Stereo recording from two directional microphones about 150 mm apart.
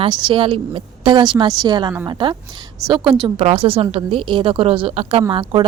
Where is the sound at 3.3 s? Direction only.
40° right (ahead or behind).